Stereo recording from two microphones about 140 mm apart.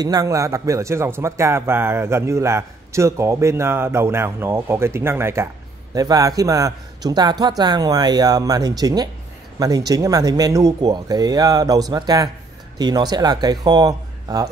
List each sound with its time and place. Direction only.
0.0 s speech: 25° right (ahead or behind)